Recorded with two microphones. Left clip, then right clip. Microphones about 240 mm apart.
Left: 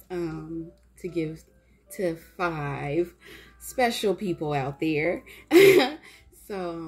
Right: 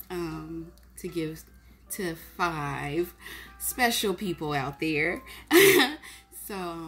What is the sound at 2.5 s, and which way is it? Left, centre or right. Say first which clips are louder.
A woman's voice: left 2 dB; centre.